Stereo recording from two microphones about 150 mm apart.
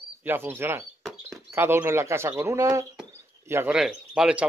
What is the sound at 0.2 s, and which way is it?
Speech, 15° right (ahead or behind).